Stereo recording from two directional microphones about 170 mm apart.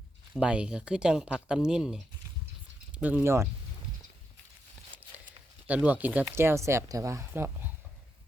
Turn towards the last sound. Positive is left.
turn(degrees=-10)  # may be behind; listen again after turning